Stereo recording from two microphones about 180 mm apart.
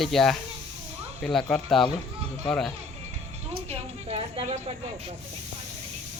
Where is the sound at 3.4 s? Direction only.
35° right (ahead or behind).